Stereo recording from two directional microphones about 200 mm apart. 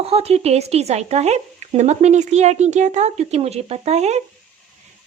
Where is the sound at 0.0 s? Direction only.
30° right (ahead or behind).